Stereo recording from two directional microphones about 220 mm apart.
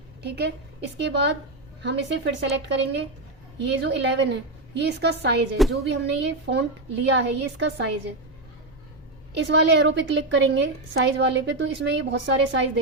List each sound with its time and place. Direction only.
0.2 s a woman's voice: 50° right (ahead or behind)
9.3 s a woman's voice: 50° right (ahead or behind)